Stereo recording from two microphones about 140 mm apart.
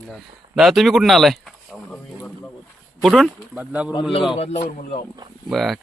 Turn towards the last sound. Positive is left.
turn(degrees=0)  # may be behind; listen again after turning